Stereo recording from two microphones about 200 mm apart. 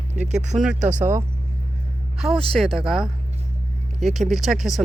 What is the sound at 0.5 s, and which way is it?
Speech, 5° right (ahead or behind).